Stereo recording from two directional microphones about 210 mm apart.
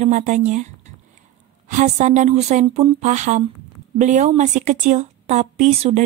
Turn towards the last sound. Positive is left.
turn(degrees=-30)  # may be behind; listen again after turning